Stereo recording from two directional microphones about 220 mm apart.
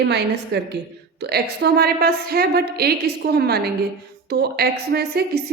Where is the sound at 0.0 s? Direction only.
50° right (ahead or behind).